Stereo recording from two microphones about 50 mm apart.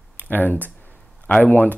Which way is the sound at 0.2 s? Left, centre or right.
Left.